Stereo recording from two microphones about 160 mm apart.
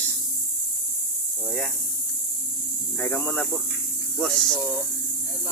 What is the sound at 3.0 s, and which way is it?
Speech, 10° left (ahead or behind).